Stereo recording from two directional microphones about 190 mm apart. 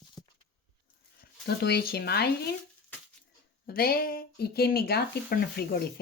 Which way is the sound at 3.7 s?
50° left (ahead or behind).